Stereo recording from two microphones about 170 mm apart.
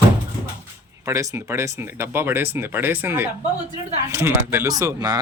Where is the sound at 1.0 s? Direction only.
20° right (ahead or behind).